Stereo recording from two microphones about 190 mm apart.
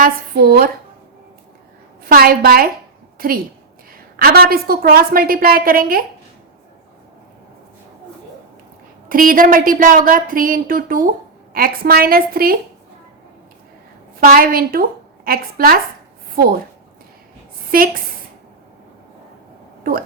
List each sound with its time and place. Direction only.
0.0 s a woman's voice: 55° right (ahead or behind)
2.0 s a woman's voice: 50° right (ahead or behind)
9.0 s a woman's voice: 45° right (ahead or behind)
14.2 s a woman's voice: 50° right (ahead or behind)
17.7 s a woman's voice: 50° right (ahead or behind)
19.9 s a woman's voice: 50° right (ahead or behind)